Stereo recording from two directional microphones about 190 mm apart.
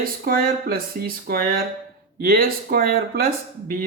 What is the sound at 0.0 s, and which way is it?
Speech, 50° right (ahead or behind).